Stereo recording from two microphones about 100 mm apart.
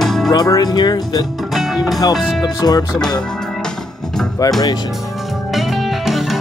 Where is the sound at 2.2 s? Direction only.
Centre (ahead or behind).